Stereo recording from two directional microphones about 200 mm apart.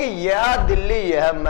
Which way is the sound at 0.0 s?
10° left (ahead or behind).